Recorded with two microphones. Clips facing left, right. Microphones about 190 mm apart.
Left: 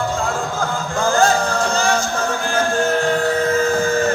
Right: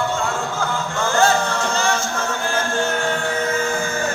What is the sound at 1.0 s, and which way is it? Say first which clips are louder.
Music: left 2 dB; 35° left (ahead or behind).